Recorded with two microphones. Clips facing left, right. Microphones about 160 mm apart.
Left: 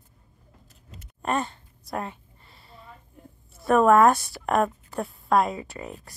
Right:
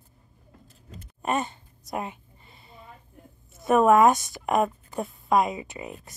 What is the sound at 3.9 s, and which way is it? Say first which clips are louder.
Speech: even; 20° right (ahead or behind).